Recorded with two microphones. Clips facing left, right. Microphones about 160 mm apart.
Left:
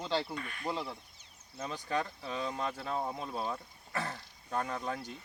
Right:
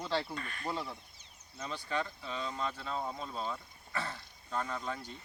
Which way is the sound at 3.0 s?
10° left (ahead or behind).